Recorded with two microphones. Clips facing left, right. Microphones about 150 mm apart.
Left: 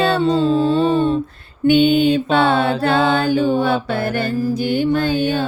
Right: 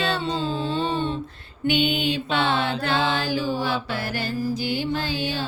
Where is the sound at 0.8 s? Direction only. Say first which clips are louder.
Left 9 dB; 45° left (ahead or behind).